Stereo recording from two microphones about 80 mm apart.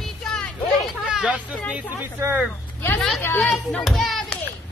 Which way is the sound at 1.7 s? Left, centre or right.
Centre.